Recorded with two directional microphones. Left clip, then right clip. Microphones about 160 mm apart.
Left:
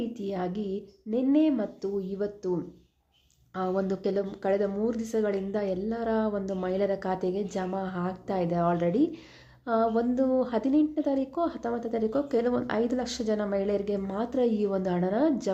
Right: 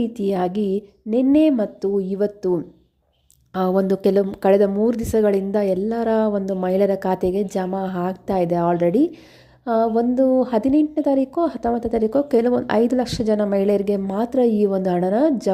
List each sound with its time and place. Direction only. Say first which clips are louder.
0.0 s a woman's voice: right 11 dB; 50° right (ahead or behind)